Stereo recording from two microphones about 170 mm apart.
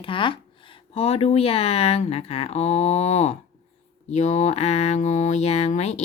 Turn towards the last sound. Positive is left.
turn(degrees=40)  # may be behind; listen again after turning